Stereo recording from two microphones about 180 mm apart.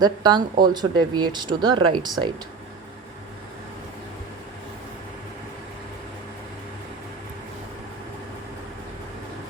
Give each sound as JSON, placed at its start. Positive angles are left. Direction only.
{"t": 0.0, "sound": "speech", "side_deg": -25}